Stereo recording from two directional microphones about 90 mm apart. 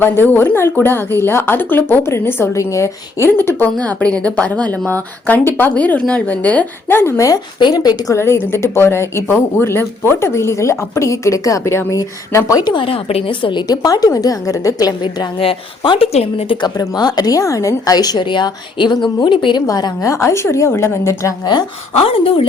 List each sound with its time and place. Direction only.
0.0 s a woman's voice: 25° left (ahead or behind)
7.6 s a woman's voice: 45° left (ahead or behind)
8.1 s a woman's voice: 30° left (ahead or behind)
12.5 s a woman's voice: 55° left (ahead or behind)
12.8 s a woman's voice: 90° left; by 13.7 s 60° left (ahead or behind)
13.8 s speech: 40° left (ahead or behind)
15.4 s a woman's voice: 80° left
16.5 s a woman's voice: 55° left (ahead or behind)
19.6 s speech: 40° left (ahead or behind)
21.9 s a woman's voice: 90° left